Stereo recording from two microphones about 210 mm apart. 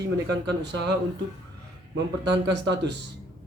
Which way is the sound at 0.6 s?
55° right (ahead or behind).